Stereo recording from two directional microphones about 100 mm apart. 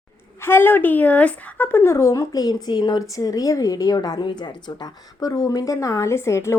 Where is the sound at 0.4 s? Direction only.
20° left (ahead or behind).